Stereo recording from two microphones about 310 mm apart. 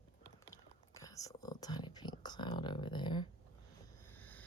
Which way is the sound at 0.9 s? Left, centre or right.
Centre.